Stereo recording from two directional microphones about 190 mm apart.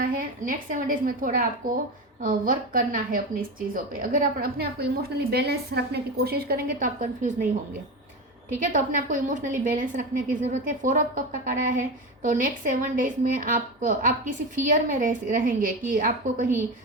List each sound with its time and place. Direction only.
0.0 s a woman's voice: 50° right (ahead or behind)
8.5 s a woman's voice: 45° right (ahead or behind)